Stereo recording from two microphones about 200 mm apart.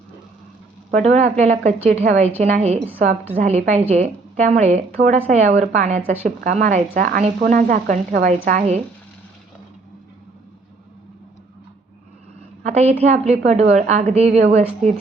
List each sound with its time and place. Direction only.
0.9 s speech: 40° right (ahead or behind)
12.6 s speech: 35° right (ahead or behind)